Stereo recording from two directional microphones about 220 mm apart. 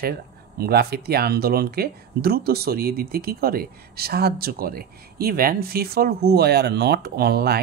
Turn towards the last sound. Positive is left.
turn(degrees=-45)  # may be behind; listen again after turning